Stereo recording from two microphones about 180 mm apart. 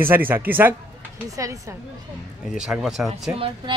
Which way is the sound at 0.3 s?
10° right (ahead or behind).